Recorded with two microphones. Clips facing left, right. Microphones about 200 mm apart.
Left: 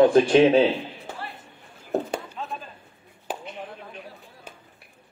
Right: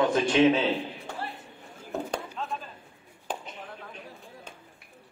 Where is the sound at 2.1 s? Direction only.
5° left (ahead or behind).